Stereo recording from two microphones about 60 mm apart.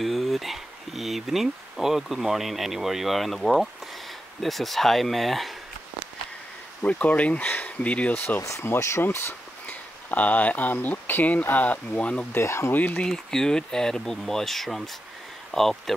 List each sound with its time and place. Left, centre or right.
0.0 s speech: centre
6.8 s speech: left
8.4 s speech: left
9.7 s speech: left
12.3 s speech: left
12.7 s speech: left
13.0 s speech: centre